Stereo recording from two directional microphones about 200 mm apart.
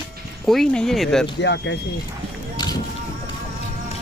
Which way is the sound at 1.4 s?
60° left (ahead or behind).